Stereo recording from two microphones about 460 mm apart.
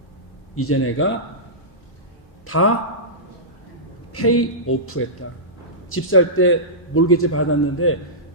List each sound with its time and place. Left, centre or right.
0.5 s a man's voice: left
2.5 s a man's voice: left
4.1 s a man's voice: left